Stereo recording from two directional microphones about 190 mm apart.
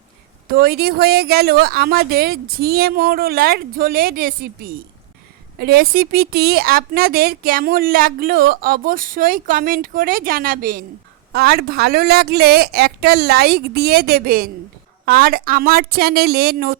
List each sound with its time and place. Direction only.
0.5 s a woman's voice: 55° right (ahead or behind)